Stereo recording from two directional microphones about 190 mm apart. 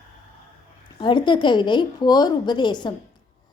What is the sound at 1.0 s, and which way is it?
A woman's voice, 25° left (ahead or behind).